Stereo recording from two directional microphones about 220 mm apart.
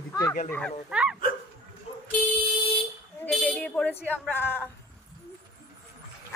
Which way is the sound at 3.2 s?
10° left (ahead or behind).